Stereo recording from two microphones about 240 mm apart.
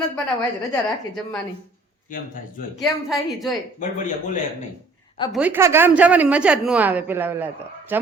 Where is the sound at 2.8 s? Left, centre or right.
Centre.